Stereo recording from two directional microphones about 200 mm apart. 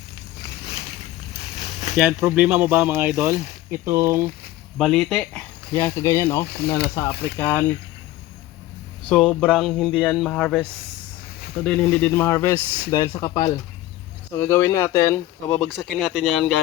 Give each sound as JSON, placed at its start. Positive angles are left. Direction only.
{"t": 1.5, "sound": "a sound", "side_deg": 35}
{"t": 2.0, "sound": "speech", "side_deg": -5}
{"t": 4.8, "sound": "speech", "side_deg": 0}
{"t": 9.0, "sound": "speech", "side_deg": 5}
{"t": 11.6, "sound": "speech", "side_deg": 5}